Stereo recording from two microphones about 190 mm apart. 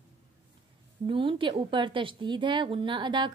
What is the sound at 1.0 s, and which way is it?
A woman's voice, 25° right (ahead or behind).